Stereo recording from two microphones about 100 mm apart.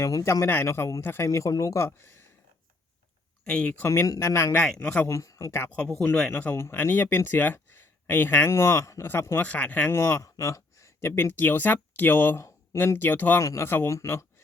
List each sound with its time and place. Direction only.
0.0 s speech: 35° left (ahead or behind)
3.5 s a man's voice: 10° left (ahead or behind)
3.8 s speech: 30° left (ahead or behind)
4.5 s a man's voice: 15° left (ahead or behind)
5.0 s speech: 30° left (ahead or behind)
6.0 s speech: 5° left (ahead or behind)
6.4 s speech: 25° left (ahead or behind)
13.4 s speech: 30° left (ahead or behind)